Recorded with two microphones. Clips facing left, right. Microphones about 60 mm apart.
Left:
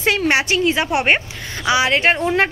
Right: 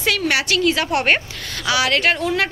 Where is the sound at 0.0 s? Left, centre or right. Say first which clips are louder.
Left 3 dB; left.